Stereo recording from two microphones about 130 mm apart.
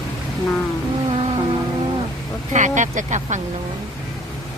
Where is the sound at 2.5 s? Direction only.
70° right (ahead or behind).